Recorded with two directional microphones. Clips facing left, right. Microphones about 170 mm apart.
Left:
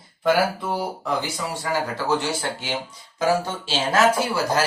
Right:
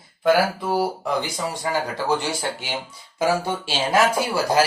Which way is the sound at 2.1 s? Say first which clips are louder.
Even; 15° right (ahead or behind).